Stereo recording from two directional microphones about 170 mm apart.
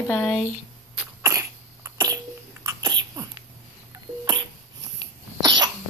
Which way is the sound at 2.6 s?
20° right (ahead or behind).